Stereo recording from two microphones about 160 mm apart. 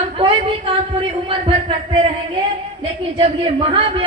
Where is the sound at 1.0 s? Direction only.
35° right (ahead or behind).